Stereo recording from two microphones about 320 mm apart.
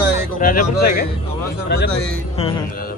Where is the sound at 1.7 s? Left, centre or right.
Left.